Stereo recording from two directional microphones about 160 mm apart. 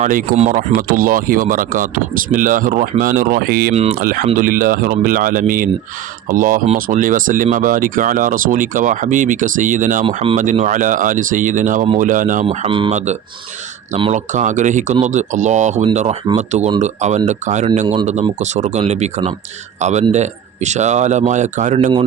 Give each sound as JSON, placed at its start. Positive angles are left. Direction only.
{"t": 0.0, "sound": "a man's voice", "side_deg": -60}
{"t": 0.5, "sound": "speech", "side_deg": -60}
{"t": 12.5, "sound": "speech", "side_deg": -35}
{"t": 14.1, "sound": "a man's voice", "side_deg": -50}